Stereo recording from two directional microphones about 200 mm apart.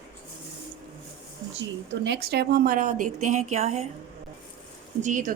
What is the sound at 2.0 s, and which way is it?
Speech, 55° right (ahead or behind).